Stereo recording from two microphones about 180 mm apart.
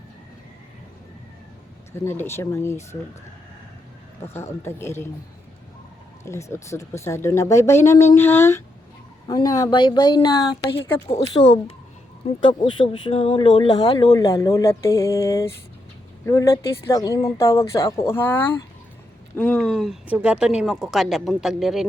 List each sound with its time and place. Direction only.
1.9 s speech: 15° left (ahead or behind)
4.4 s speech: 15° left (ahead or behind)
6.2 s speech: 15° left (ahead or behind); by 21.8 s centre (ahead or behind)